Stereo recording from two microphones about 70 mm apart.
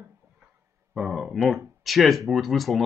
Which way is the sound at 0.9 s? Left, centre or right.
Centre.